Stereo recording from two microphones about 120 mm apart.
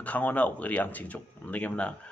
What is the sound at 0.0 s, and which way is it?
Speech, 10° left (ahead or behind).